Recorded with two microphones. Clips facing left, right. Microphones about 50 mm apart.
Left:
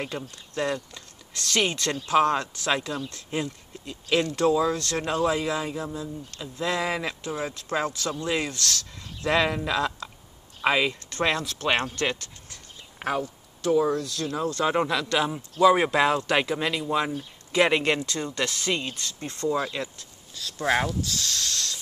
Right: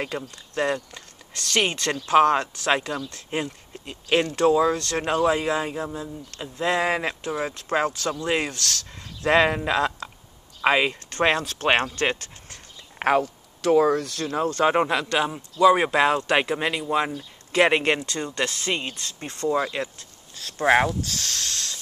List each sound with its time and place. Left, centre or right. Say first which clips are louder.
0.1 s speech: right 3 dB; right
13.0 s speech: right 7 dB; right
18.4 s speech: right 1 dB; centre
20.0 s a sound: left 1 dB; right
20.6 s speech: right 5 dB; centre
21.0 s speech: even; right